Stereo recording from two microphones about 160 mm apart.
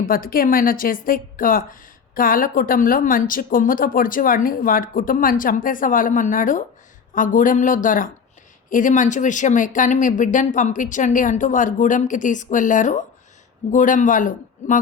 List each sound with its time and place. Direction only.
0.0 s a woman's voice: 60° left (ahead or behind)